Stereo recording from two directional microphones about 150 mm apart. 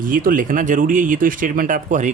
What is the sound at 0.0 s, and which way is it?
Speech, 65° right (ahead or behind).